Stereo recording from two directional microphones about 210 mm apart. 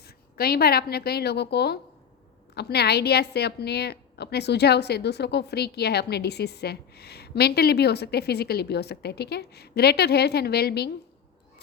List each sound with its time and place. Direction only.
0.3 s a woman's voice: 45° left (ahead or behind)